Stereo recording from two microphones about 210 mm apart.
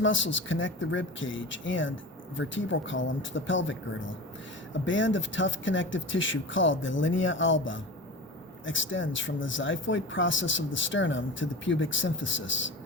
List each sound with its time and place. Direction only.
0.0 s speech: 65° left (ahead or behind)
4.9 s speech: 65° left (ahead or behind)